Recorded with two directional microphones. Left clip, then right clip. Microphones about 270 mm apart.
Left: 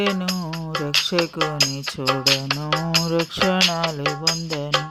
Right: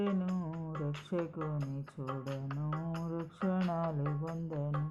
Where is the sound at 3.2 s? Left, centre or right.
Left.